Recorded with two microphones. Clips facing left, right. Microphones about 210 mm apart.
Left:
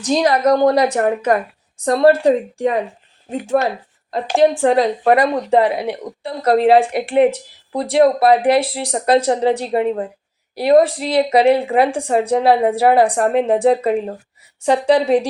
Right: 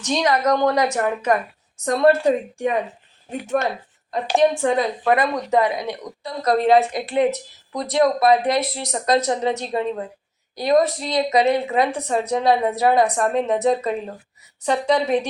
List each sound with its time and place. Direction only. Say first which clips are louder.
0.0 s a woman's voice: left 5 dB; 35° left (ahead or behind)
4.7 s a woman's voice: left 5 dB; 35° left (ahead or behind)